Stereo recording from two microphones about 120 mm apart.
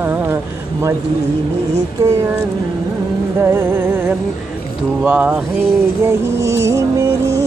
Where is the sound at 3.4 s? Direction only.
25° right (ahead or behind).